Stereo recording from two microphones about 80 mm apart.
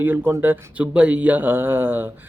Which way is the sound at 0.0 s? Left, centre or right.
Right.